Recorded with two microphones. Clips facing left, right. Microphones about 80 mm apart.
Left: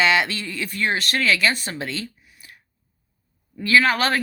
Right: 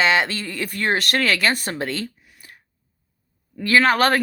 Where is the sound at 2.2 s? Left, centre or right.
Right.